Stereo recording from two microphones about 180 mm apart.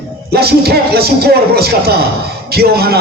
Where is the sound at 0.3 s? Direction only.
60° right (ahead or behind).